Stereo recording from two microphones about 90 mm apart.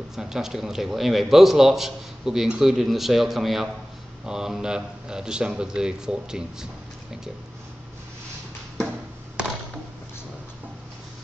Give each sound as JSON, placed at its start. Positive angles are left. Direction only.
{"t": 0.1, "sound": "a man's voice", "side_deg": -5}